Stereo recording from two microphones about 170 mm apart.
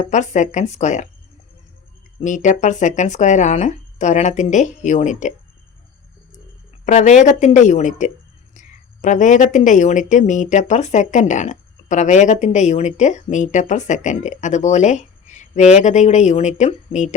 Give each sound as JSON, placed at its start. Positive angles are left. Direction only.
{"t": 0.0, "sound": "a woman's voice", "side_deg": 45}
{"t": 2.2, "sound": "a woman's voice", "side_deg": 45}
{"t": 6.8, "sound": "a woman's voice", "side_deg": 45}